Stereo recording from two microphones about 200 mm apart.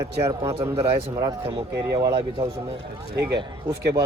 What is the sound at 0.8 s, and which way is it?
A man's voice, 25° right (ahead or behind).